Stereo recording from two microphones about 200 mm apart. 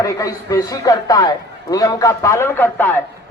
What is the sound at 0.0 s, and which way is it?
A man's voice, 15° left (ahead or behind).